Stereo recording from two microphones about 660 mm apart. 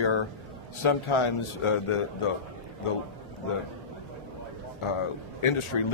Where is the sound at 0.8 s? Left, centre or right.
Left.